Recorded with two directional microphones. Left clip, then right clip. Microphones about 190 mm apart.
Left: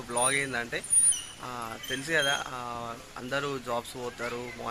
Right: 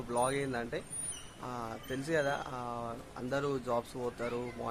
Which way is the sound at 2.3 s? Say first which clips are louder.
Left 5 dB; 15° left (ahead or behind).